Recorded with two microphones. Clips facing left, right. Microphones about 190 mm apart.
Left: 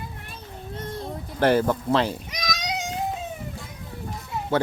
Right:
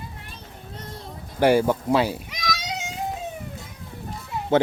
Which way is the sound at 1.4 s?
10° right (ahead or behind).